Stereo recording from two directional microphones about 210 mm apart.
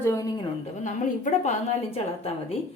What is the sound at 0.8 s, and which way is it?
A woman's voice, 35° left (ahead or behind).